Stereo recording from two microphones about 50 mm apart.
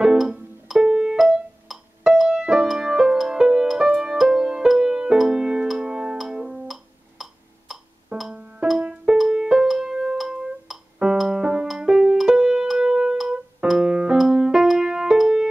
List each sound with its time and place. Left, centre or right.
0.0 s music: centre
0.7 s piano: centre
1.7 s music: centre
5.1 s music: centre
8.3 s music: right
8.6 s music: centre
14.1 s keyboard: centre